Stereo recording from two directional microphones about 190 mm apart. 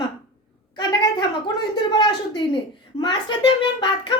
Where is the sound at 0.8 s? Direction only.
20° left (ahead or behind).